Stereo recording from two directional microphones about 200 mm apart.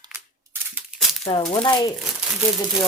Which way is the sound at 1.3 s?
15° left (ahead or behind).